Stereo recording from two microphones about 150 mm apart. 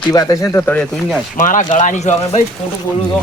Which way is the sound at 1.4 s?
60° left (ahead or behind).